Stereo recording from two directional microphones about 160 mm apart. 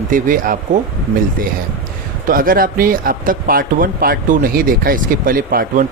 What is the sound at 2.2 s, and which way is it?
Speech, 60° right (ahead or behind).